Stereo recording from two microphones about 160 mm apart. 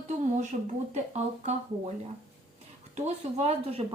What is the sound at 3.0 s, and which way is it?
Speech, 45° right (ahead or behind).